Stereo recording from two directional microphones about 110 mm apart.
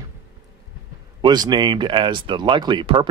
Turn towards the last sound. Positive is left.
turn(degrees=-50)  # may be behind; listen again after turning